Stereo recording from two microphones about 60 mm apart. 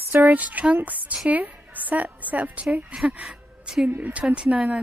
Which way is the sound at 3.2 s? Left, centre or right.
Centre.